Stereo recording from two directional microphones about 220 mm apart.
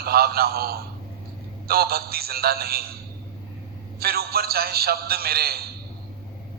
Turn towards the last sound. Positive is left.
turn(degrees=-45)  # may be behind; listen again after turning